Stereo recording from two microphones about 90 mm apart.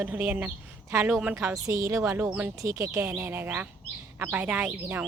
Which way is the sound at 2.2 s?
10° right (ahead or behind).